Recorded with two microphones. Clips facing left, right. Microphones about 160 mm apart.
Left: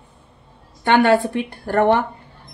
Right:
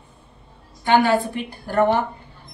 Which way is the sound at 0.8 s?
65° left (ahead or behind).